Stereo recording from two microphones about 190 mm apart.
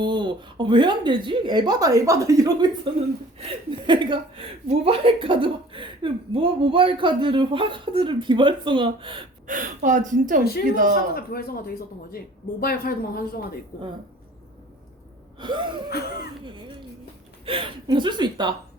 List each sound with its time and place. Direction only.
0.0 s speech: 25° right (ahead or behind)
9.5 s speech: 45° right (ahead or behind)
11.1 s speech: 55° left (ahead or behind)
15.4 s speech: 25° right (ahead or behind)
15.9 s speech: 55° left (ahead or behind)
16.4 s speech: 25° right (ahead or behind)